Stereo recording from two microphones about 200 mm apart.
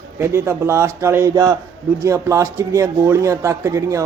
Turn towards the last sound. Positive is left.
turn(degrees=-15)  # may be behind; listen again after turning